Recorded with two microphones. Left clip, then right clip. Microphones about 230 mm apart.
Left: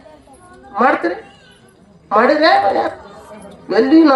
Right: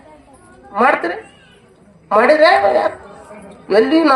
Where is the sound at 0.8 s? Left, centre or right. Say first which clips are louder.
Even; right.